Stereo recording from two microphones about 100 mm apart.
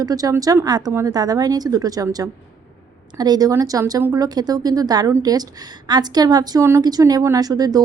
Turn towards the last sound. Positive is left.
turn(degrees=-40)  # may be behind; listen again after turning